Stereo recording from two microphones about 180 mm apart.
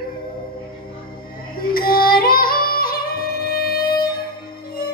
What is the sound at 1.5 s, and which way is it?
Music, 55° left (ahead or behind).